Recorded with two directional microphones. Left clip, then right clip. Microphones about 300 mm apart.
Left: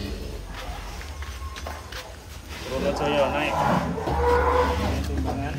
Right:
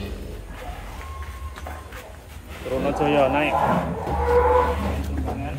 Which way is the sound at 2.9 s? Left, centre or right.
Centre.